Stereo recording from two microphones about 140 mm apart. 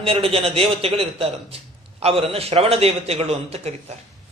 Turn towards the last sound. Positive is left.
turn(degrees=-50)  # may be behind; listen again after turning